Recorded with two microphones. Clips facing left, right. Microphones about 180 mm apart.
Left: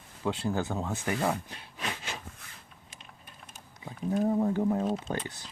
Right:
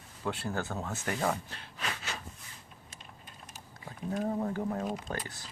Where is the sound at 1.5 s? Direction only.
15° left (ahead or behind).